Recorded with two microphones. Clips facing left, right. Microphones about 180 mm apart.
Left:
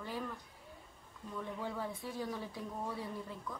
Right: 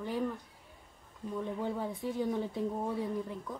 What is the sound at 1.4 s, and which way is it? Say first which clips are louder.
Speech: right 5 dB; 20° right (ahead or behind).